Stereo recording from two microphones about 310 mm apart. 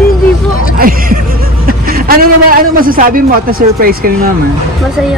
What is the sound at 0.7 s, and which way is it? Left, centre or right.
A man's voice, right.